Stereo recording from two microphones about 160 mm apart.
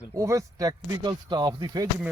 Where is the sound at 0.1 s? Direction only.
20° right (ahead or behind).